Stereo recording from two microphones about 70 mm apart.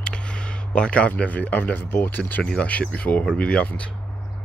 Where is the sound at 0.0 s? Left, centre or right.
Centre.